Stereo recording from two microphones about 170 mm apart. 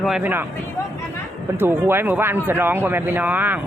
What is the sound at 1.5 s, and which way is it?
Speech, 15° right (ahead or behind).